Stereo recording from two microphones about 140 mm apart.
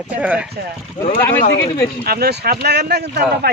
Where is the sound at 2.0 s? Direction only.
90° right.